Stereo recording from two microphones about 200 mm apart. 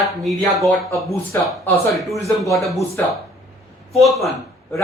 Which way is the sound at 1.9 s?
Centre (ahead or behind).